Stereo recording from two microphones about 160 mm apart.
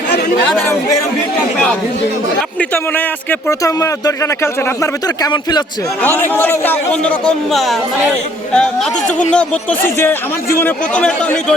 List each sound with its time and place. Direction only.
0.6 s a man's voice: 15° left (ahead or behind)
2.6 s a man's voice: 10° left (ahead or behind)
6.0 s a man's voice: 10° left (ahead or behind)